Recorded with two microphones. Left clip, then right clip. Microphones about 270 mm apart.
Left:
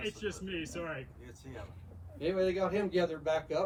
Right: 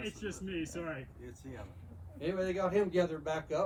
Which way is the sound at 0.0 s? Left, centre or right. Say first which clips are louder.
Left 3 dB; centre.